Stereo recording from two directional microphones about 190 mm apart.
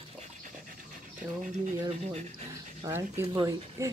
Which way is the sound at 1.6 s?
35° right (ahead or behind).